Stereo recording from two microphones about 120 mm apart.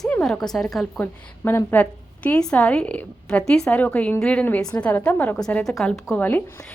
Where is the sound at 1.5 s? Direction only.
15° left (ahead or behind).